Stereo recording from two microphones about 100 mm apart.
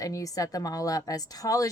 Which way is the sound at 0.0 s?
35° left (ahead or behind).